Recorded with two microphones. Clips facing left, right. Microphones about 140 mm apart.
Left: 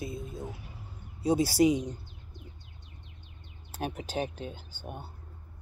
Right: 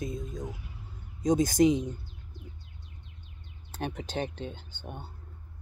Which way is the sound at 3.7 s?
10° left (ahead or behind).